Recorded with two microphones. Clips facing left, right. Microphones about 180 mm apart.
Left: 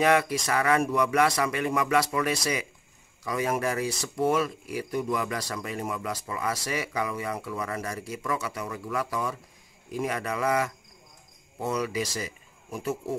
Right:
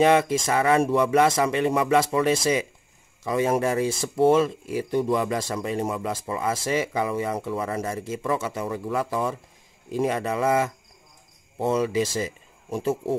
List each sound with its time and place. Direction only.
0.0 s speech: 25° right (ahead or behind)